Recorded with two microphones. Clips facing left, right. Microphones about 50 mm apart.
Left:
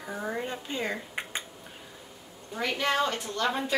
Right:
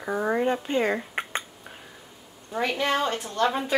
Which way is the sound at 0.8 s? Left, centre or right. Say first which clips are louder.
Right 7 dB; right.